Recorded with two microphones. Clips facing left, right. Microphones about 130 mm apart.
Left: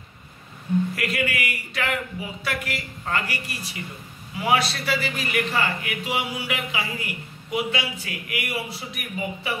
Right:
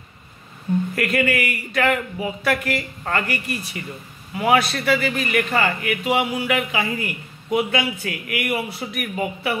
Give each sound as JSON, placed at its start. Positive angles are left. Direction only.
{"t": 0.9, "sound": "a man's voice", "side_deg": -50}